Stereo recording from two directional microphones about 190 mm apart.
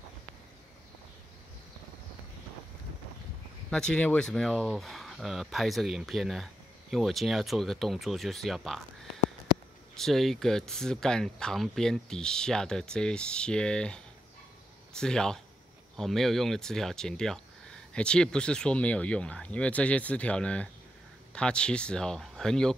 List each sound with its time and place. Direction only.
3.7 s speech: 5° left (ahead or behind)
9.9 s speech: centre (ahead or behind)